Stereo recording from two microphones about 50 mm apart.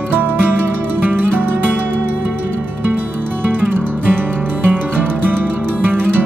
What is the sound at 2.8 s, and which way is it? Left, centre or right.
Music, right.